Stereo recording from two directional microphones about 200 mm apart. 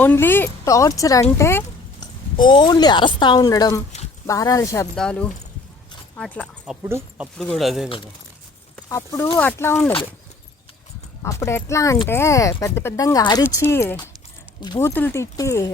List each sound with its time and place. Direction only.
0.0 s speech: 10° left (ahead or behind)
2.3 s speech: 25° left (ahead or behind)
4.9 s speech: 5° left (ahead or behind)
6.8 s speech: 10° right (ahead or behind)
7.3 s speech: centre (ahead or behind)
7.9 s speech: 25° left (ahead or behind)
8.7 s speech: 15° left (ahead or behind)
11.2 s speech: 15° left (ahead or behind)